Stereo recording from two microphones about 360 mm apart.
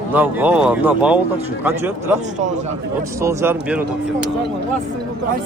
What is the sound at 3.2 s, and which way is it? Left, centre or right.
Speech, centre.